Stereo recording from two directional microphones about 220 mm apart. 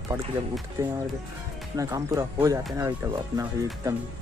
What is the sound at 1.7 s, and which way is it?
Speech, 15° right (ahead or behind).